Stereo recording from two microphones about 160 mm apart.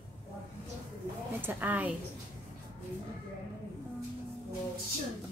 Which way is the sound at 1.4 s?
10° right (ahead or behind).